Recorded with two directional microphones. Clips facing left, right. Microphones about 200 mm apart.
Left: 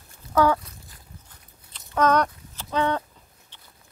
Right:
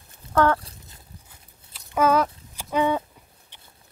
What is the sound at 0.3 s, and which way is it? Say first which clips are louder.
Speech: even; 5° left (ahead or behind).